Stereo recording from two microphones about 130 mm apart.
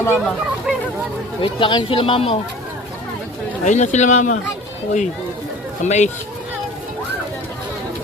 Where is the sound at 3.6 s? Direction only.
70° left (ahead or behind).